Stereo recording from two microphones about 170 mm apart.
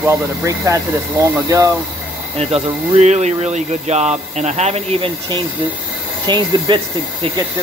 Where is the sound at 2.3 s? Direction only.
40° right (ahead or behind).